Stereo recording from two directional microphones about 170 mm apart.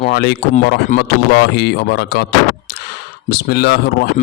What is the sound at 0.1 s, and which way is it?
Speech, 70° left (ahead or behind).